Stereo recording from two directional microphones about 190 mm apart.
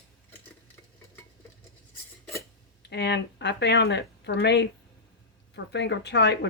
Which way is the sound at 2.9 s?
65° left (ahead or behind).